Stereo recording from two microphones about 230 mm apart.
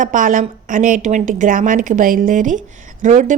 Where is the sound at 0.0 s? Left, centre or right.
Right.